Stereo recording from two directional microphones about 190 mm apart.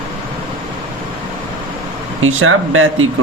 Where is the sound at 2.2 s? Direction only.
90° right.